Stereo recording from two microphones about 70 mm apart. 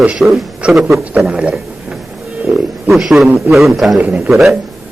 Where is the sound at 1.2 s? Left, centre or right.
Centre.